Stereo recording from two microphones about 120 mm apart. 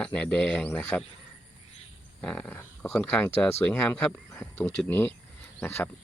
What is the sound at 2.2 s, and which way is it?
Speech, 10° left (ahead or behind).